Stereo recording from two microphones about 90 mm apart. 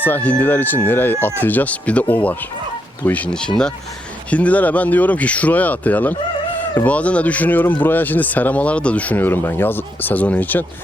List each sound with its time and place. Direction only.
0.0 s speech: 20° left (ahead or behind)